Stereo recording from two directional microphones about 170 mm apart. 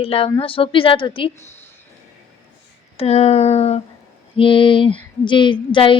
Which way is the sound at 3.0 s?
40° left (ahead or behind).